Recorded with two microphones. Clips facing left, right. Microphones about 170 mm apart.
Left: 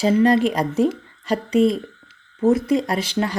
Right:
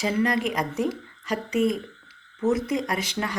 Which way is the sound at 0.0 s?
30° left (ahead or behind).